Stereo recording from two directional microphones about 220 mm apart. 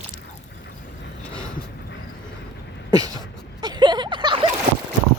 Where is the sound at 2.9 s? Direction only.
15° right (ahead or behind).